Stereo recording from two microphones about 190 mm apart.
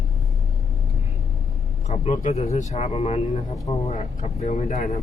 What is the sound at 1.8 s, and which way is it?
Speech, 35° left (ahead or behind).